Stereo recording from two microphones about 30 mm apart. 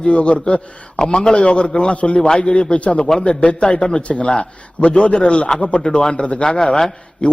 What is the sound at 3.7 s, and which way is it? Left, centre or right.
Speech, left.